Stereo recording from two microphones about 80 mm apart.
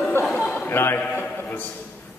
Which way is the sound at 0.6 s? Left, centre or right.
Left.